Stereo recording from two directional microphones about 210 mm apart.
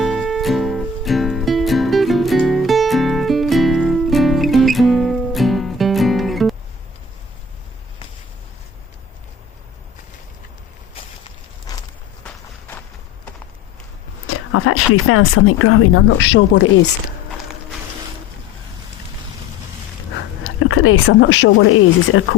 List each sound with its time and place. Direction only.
0.0 s music: centre (ahead or behind)
12.2 s walk: 5° left (ahead or behind)
14.3 s speech: 85° left; by 16.9 s 60° left (ahead or behind)
20.4 s speech: 75° left (ahead or behind)